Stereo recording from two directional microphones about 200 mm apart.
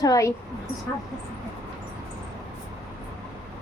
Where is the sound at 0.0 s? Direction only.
15° left (ahead or behind).